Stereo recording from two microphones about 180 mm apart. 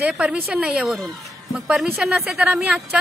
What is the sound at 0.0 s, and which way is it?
A woman's voice, centre (ahead or behind).